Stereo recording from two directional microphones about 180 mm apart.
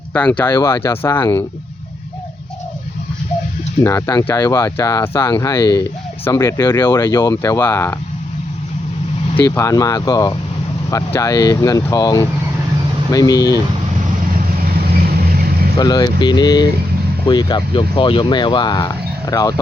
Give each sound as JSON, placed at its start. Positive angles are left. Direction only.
{"t": 0.1, "sound": "speech", "side_deg": 10}
{"t": 3.8, "sound": "speech", "side_deg": 15}
{"t": 9.6, "sound": "speech", "side_deg": 20}
{"t": 14.3, "sound": "vehicle", "side_deg": -55}
{"t": 15.8, "sound": "speech", "side_deg": 25}